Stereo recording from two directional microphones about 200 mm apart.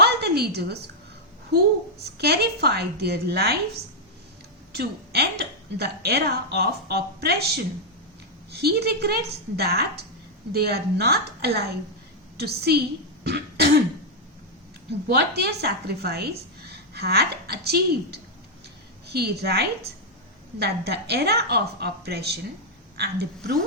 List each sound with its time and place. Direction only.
0.0 s a sound: 55° right (ahead or behind)
1.5 s speech: 55° right (ahead or behind)
4.7 s a woman's voice: 55° right (ahead or behind)
13.2 s throat clearing: 55° right (ahead or behind)
14.8 s a woman's voice: 55° right (ahead or behind)